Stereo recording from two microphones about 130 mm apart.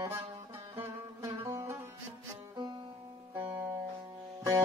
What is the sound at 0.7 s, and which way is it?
Music, 20° right (ahead or behind).